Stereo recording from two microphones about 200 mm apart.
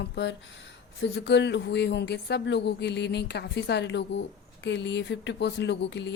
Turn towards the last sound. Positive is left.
turn(degrees=60)  # may be behind; listen again after turning